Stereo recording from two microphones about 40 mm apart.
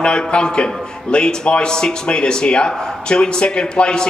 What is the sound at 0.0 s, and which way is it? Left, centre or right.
A man's voice, left.